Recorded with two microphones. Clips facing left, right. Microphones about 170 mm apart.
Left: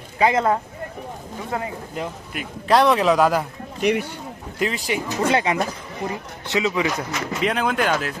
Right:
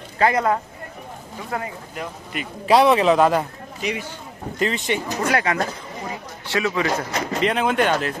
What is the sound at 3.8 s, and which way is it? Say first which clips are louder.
Speech: left 7 dB; 60° left (ahead or behind).